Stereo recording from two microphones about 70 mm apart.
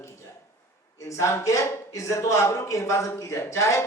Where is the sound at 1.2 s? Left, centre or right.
Left.